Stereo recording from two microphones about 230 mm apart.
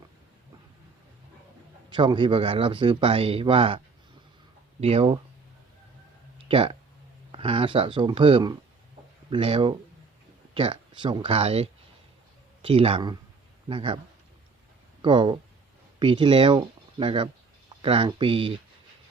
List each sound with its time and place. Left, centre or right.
1.9 s a man's voice: right
4.8 s a man's voice: right
6.5 s a man's voice: right
15.0 s a man's voice: right